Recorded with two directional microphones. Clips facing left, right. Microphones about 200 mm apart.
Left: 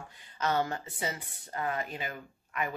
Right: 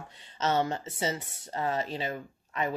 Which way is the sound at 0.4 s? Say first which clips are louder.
Right 2 dB; 25° right (ahead or behind).